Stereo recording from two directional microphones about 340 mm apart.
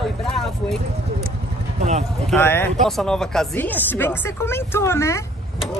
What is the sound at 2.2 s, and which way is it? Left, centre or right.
Speech, centre.